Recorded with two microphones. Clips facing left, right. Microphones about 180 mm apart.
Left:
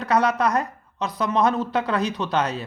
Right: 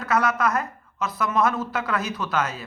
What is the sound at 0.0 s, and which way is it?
Speech, 30° left (ahead or behind).